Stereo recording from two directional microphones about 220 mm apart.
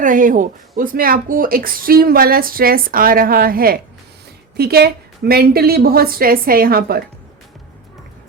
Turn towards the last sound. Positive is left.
turn(degrees=-45)  # may be behind; listen again after turning